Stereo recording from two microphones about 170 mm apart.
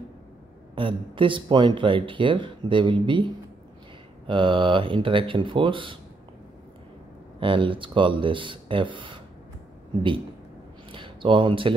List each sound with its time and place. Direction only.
0.7 s speech: 30° right (ahead or behind)
4.3 s speech: 30° right (ahead or behind)
7.3 s speech: 30° right (ahead or behind)
10.9 s a sound: 30° right (ahead or behind)